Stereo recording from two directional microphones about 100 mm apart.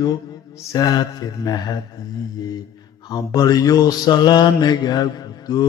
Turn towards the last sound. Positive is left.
turn(degrees=40)  # may be behind; listen again after turning